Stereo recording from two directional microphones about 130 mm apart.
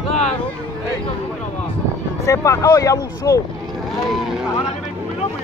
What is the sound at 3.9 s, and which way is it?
Speech, centre (ahead or behind).